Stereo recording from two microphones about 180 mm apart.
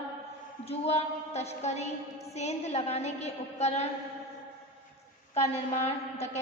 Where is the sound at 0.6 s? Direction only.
35° left (ahead or behind).